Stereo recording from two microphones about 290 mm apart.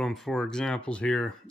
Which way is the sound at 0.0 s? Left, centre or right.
Centre.